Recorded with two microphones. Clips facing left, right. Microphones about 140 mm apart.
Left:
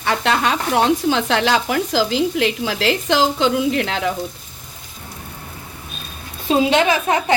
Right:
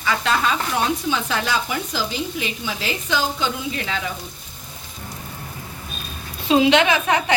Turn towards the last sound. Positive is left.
turn(degrees=35)  # may be behind; listen again after turning